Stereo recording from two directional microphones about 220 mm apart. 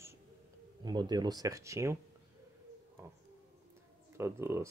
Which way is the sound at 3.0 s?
15° right (ahead or behind).